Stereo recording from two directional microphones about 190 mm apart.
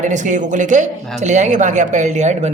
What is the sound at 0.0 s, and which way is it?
A woman's voice, 40° right (ahead or behind).